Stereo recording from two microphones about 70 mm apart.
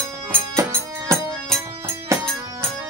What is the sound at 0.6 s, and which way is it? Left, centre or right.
Music, right.